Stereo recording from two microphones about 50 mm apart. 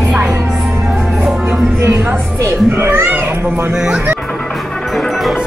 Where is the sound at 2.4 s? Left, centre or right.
Right.